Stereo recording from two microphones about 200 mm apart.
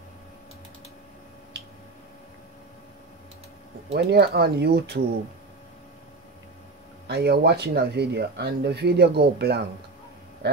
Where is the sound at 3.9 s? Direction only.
55° right (ahead or behind).